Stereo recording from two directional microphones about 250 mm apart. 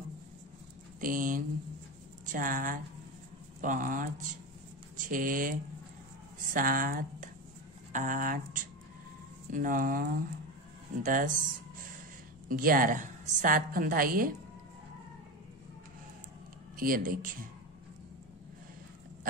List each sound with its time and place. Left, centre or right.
1.0 s a woman's voice: right
12.4 s a woman's voice: right
16.7 s a woman's voice: right